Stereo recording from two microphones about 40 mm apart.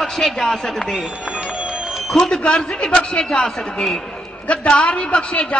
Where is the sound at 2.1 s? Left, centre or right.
Centre.